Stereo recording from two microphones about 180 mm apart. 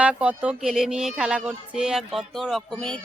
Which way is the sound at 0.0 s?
5° right (ahead or behind).